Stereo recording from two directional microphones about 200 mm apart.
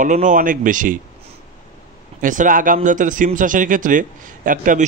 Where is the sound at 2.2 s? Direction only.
40° right (ahead or behind).